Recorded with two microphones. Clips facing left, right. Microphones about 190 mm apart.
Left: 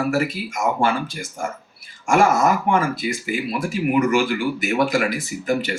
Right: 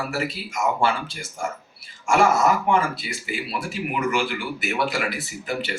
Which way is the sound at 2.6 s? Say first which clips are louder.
Left 2 dB; 50° left (ahead or behind).